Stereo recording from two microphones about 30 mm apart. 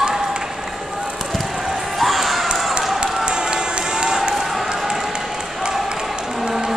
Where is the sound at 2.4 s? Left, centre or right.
Right.